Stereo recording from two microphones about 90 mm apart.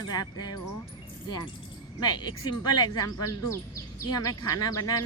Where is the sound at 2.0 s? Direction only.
50° left (ahead or behind).